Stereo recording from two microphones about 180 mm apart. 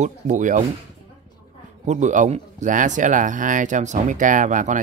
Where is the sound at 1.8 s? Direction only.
40° right (ahead or behind).